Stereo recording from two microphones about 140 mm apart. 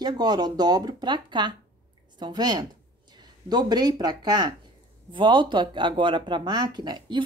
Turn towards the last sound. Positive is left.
turn(degrees=-30)  # may be behind; listen again after turning